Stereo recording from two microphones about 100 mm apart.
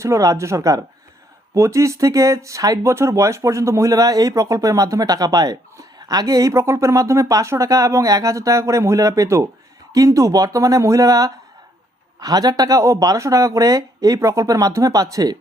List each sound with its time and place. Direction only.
0.0 s speech: 30° right (ahead or behind)